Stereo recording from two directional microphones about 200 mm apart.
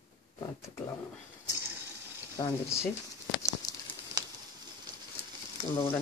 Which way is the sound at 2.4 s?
25° left (ahead or behind).